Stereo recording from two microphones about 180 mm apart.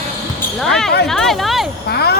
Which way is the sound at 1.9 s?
60° left (ahead or behind).